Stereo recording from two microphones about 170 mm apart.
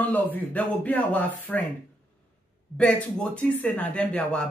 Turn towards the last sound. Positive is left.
turn(degrees=5)  # may be behind; listen again after turning